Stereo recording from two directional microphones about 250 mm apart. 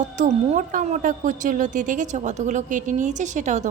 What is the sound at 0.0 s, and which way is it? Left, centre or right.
Speech, right.